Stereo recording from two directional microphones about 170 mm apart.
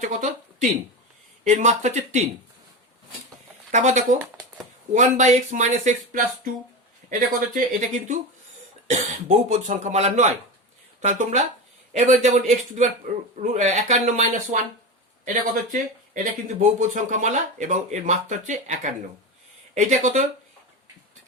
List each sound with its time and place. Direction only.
0.0 s a sound: 45° right (ahead or behind)
1.5 s speech: 45° right (ahead or behind)
3.7 s speech: 45° right (ahead or behind)
9.5 s speech: 40° right (ahead or behind)